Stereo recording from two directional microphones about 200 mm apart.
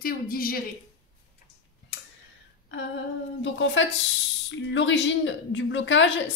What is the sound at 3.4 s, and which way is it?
A woman's voice, 70° left (ahead or behind).